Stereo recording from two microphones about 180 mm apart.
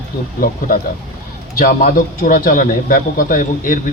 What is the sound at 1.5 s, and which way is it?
A woman's voice, 50° left (ahead or behind).